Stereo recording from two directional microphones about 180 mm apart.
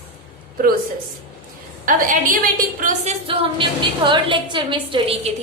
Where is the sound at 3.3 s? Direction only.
30° right (ahead or behind).